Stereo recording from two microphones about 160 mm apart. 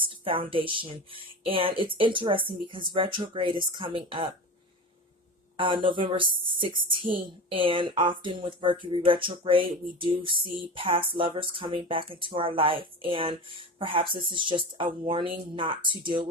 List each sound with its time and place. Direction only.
0.0 s a woman's voice: 35° right (ahead or behind)
5.5 s a woman's voice: 30° right (ahead or behind)